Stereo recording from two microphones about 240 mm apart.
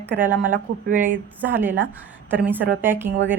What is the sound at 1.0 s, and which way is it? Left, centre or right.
Speech, centre.